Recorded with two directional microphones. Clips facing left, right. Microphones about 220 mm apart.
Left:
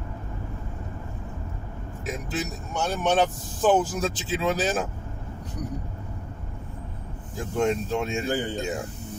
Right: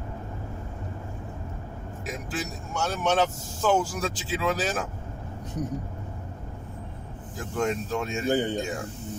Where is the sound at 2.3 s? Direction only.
20° left (ahead or behind).